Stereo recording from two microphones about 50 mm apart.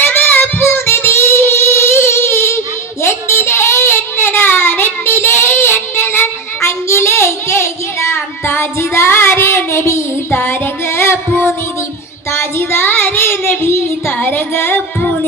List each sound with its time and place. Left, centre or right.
0.0 s child singing: left
14.2 s music: left